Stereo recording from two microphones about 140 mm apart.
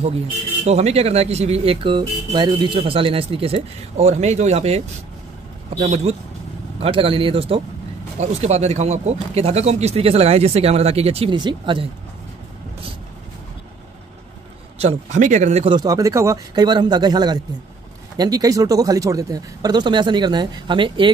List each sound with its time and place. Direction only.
0.7 s speech: 50° right (ahead or behind)
14.8 s speech: 55° right (ahead or behind)
15.7 s speech: 25° right (ahead or behind)